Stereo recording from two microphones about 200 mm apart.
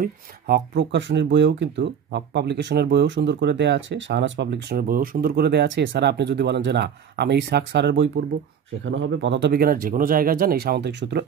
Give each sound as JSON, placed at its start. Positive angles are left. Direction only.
{"t": 0.0, "sound": "speech", "side_deg": -55}